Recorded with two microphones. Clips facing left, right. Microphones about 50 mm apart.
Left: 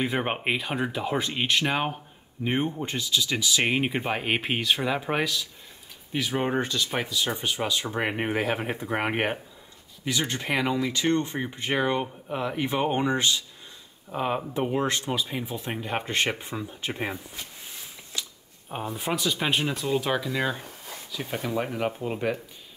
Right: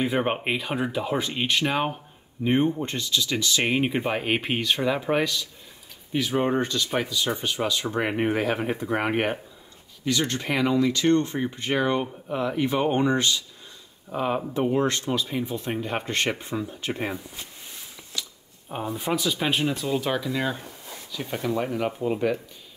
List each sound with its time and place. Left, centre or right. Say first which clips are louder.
0.0 s speech: right 2 dB; centre
18.1 s a sound: right 1 dB; centre
18.9 s speech: right 1 dB; centre